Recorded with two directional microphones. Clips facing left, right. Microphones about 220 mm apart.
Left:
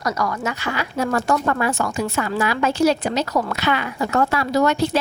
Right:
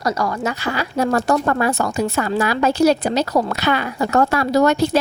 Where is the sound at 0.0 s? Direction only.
30° right (ahead or behind).